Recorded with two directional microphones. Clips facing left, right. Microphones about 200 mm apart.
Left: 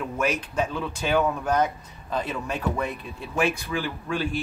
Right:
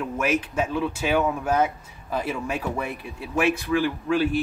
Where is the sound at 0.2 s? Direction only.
5° right (ahead or behind).